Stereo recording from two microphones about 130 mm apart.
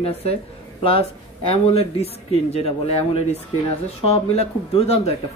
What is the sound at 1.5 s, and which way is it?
Speech, 50° left (ahead or behind).